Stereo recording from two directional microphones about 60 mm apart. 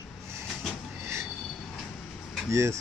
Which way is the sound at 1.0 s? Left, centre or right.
Right.